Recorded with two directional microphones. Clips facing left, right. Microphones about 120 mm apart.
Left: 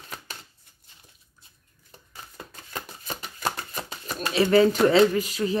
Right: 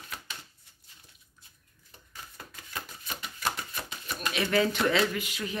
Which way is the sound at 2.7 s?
35° left (ahead or behind).